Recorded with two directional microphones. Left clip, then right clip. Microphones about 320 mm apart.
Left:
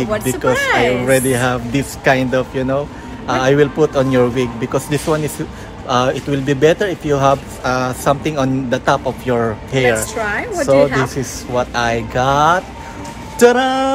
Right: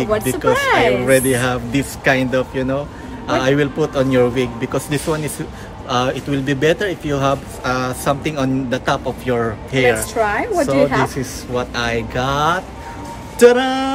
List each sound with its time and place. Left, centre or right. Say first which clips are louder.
0.2 s speech: even; centre
10.1 s speech: right 2 dB; centre
11.1 s speech: left 3 dB; centre